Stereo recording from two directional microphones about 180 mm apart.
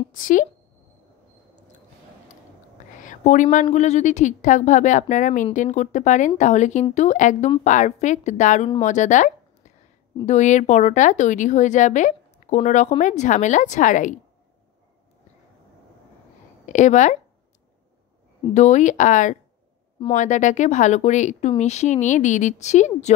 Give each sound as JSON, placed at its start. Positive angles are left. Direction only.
{"t": 0.1, "sound": "speech", "side_deg": 50}
{"t": 3.0, "sound": "a sound", "side_deg": 45}
{"t": 3.7, "sound": "speech", "side_deg": 40}
{"t": 16.6, "sound": "speech", "side_deg": 40}
{"t": 18.5, "sound": "speech", "side_deg": 40}